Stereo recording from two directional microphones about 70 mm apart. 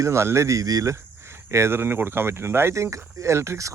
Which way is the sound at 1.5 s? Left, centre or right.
Right.